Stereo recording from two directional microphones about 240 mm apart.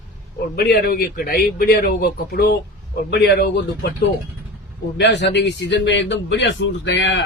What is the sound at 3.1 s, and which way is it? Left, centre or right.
Speech, left.